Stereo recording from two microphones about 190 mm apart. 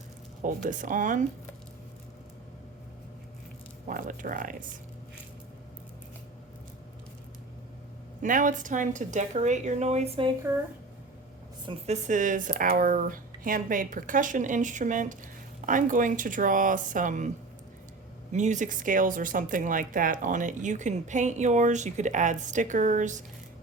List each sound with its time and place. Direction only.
0.4 s speech: 45° right (ahead or behind)
3.8 s speech: 45° right (ahead or behind)
8.2 s a woman's voice: 45° right (ahead or behind)
11.6 s a woman's voice: 25° right (ahead or behind)
12.0 s a woman's voice: 45° right (ahead or behind)